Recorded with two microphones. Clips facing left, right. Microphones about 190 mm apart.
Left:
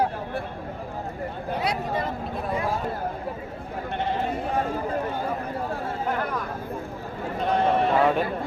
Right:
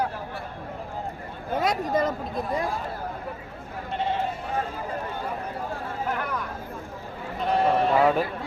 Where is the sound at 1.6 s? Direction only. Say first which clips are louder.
Right 4 dB; 45° right (ahead or behind).